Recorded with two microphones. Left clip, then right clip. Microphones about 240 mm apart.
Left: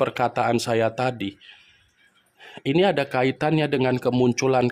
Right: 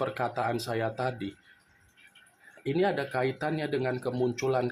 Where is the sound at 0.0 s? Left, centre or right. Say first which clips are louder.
Left 8 dB; left.